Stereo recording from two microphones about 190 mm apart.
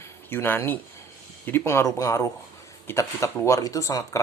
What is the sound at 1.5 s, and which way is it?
Speech, 10° left (ahead or behind).